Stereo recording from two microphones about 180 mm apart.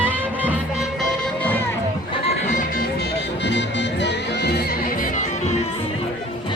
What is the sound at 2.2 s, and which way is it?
Music, 40° left (ahead or behind).